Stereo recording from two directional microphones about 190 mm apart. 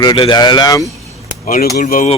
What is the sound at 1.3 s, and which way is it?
Chop, 45° left (ahead or behind).